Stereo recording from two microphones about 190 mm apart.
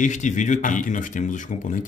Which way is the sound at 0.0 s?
40° left (ahead or behind).